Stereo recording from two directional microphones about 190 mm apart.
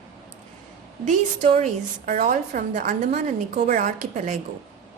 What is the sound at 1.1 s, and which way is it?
A woman's voice, 40° right (ahead or behind).